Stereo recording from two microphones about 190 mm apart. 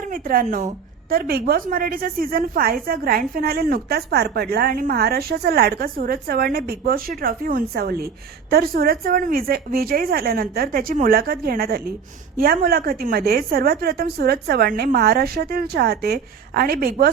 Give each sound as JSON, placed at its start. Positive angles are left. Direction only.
{"t": 0.1, "sound": "a woman's voice", "side_deg": -45}